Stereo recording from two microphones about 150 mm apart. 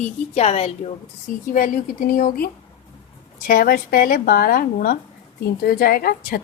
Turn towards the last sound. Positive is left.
turn(degrees=80)